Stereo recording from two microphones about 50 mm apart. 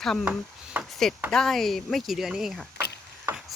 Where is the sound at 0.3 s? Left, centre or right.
Right.